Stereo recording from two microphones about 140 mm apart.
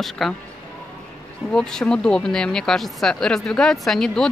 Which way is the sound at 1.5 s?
5° left (ahead or behind).